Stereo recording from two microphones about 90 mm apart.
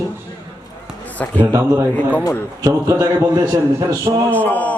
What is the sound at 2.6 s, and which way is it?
Speech, 40° right (ahead or behind).